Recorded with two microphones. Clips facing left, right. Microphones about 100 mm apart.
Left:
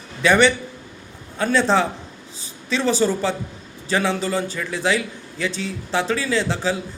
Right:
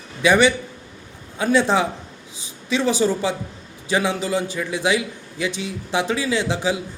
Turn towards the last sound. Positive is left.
turn(degrees=-15)  # may be behind; listen again after turning